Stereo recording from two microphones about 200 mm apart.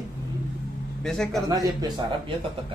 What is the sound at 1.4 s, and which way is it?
Speech, 20° right (ahead or behind).